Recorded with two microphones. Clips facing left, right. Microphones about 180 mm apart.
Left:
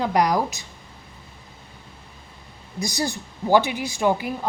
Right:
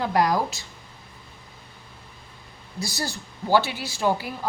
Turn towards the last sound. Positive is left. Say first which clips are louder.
# left 3 dB
turn(degrees=20)  # may be behind; listen again after turning